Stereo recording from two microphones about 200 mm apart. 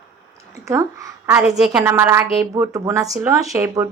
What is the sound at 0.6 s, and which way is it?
A woman's voice, 15° right (ahead or behind).